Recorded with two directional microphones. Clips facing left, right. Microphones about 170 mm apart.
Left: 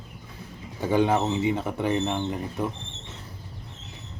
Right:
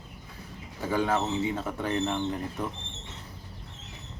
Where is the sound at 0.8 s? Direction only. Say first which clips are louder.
Left 5 dB; 20° left (ahead or behind).